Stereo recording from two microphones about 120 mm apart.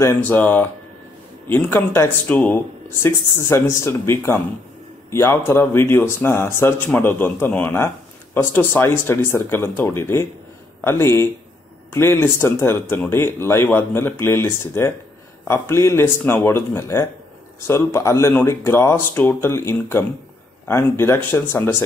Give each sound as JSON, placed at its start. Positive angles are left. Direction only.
{"t": 0.0, "sound": "speech", "side_deg": 20}